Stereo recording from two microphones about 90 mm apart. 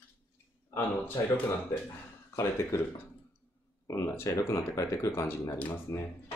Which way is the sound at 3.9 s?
35° left (ahead or behind).